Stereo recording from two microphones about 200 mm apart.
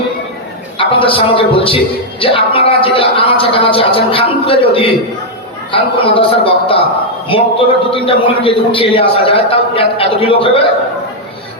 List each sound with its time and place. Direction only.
0.8 s a man's voice: 25° left (ahead or behind)